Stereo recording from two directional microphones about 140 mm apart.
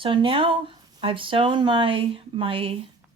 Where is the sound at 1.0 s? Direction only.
40° right (ahead or behind).